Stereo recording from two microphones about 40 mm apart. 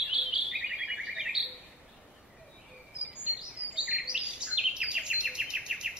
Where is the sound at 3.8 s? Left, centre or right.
Right.